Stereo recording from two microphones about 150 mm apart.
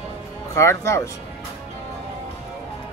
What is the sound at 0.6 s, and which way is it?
Speech, 20° left (ahead or behind).